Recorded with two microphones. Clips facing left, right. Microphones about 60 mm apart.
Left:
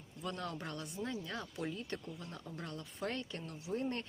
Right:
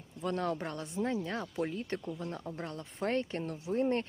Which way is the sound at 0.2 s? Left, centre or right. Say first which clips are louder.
Right 8 dB; right.